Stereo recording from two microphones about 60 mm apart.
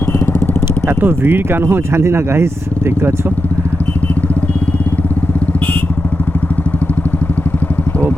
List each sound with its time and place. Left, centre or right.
0.9 s speech: right